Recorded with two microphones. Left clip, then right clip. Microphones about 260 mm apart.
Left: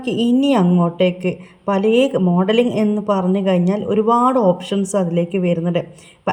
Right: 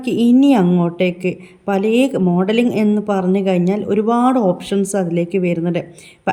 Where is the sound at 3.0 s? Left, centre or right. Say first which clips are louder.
Right 1 dB; centre.